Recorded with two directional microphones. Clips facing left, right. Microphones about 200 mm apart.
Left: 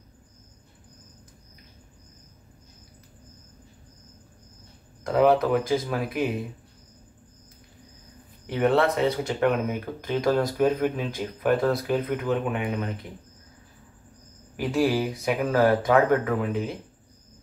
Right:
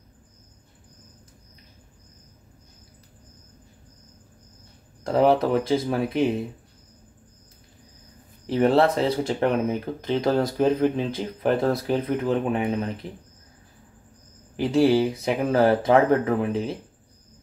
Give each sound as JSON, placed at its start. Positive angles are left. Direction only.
{"t": 5.0, "sound": "speech", "side_deg": -30}
{"t": 8.5, "sound": "speech", "side_deg": -30}
{"t": 14.6, "sound": "speech", "side_deg": -25}